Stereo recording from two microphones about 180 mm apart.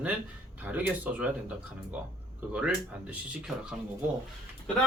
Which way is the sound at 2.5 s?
5° right (ahead or behind).